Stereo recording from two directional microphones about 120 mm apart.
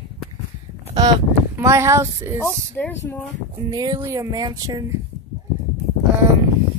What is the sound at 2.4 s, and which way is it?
Speech, 20° left (ahead or behind).